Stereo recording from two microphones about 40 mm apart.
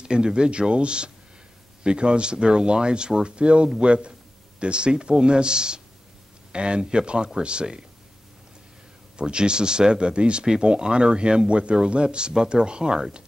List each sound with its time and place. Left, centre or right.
0.0 s speech: right
9.1 s speech: right